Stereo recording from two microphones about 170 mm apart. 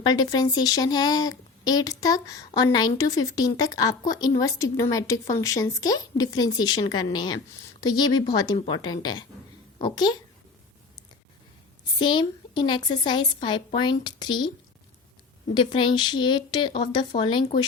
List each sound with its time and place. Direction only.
0.0 s a woman's voice: 25° left (ahead or behind)
11.9 s a woman's voice: 25° left (ahead or behind)
15.5 s a woman's voice: 30° left (ahead or behind)